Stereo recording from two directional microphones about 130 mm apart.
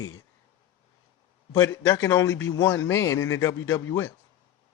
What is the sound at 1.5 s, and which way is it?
Speech, 25° left (ahead or behind).